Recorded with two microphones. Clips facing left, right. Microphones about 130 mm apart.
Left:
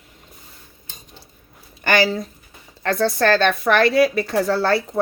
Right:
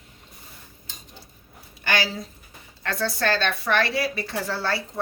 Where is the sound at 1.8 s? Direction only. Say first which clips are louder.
Left 8 dB; 50° left (ahead or behind).